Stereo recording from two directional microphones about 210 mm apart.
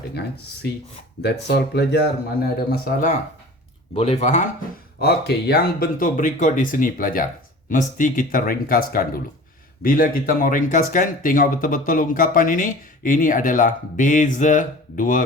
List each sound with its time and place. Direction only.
1.2 s speech: 50° left (ahead or behind)
3.9 s speech: 30° left (ahead or behind)
4.9 s speech: 50° left (ahead or behind)